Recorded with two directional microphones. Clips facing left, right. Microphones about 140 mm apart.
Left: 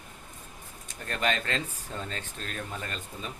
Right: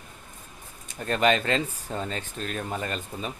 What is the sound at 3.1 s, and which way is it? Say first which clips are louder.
Speech: right 6 dB; 80° right.